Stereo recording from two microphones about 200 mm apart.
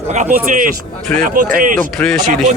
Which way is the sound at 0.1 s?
40° right (ahead or behind).